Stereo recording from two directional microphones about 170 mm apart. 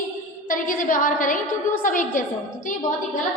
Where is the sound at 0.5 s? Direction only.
50° left (ahead or behind).